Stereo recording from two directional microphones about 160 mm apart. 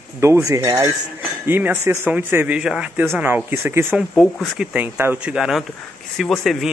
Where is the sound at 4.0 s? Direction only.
Centre (ahead or behind).